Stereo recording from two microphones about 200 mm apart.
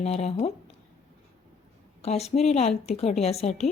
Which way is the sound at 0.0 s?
30° left (ahead or behind).